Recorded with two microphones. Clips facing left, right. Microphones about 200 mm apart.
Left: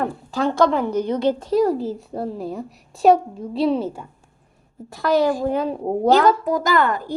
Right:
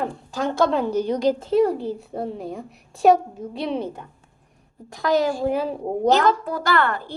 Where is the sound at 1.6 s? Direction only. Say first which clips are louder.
Left 2 dB; centre (ahead or behind).